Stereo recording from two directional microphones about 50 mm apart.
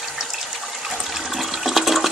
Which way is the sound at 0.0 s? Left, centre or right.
Centre.